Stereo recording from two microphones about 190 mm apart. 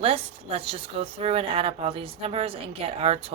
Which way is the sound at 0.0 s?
30° right (ahead or behind).